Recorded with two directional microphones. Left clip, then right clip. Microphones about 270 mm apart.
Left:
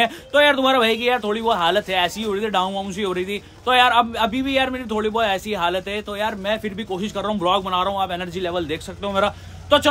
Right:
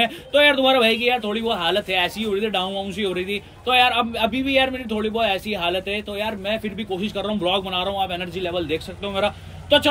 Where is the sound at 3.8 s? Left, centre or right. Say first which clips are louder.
Left 3 dB; centre.